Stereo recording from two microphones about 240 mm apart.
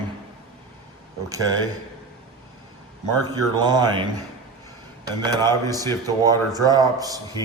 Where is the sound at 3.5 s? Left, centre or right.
Centre.